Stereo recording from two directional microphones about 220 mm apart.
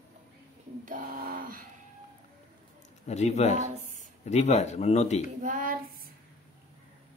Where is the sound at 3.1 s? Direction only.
30° left (ahead or behind).